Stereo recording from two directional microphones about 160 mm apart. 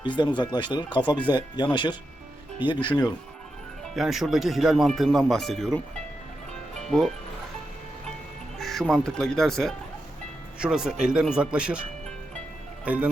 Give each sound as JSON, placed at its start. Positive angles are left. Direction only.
{"t": 0.0, "sound": "speech", "side_deg": 30}
{"t": 3.9, "sound": "speech", "side_deg": 0}
{"t": 8.5, "sound": "speech", "side_deg": 0}
{"t": 12.8, "sound": "speech", "side_deg": -10}